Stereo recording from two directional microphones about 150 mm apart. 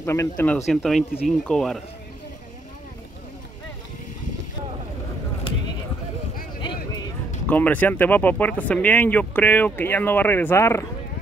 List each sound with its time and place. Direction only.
0.0 s speech: 20° left (ahead or behind)
0.7 s speech: centre (ahead or behind)
6.6 s a sound: 25° left (ahead or behind)
7.4 s speech: 10° left (ahead or behind)